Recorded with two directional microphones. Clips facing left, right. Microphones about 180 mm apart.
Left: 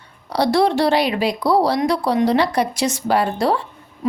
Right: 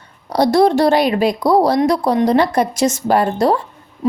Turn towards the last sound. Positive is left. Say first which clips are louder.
# right 3 dB
turn(degrees=-45)  # may be behind; listen again after turning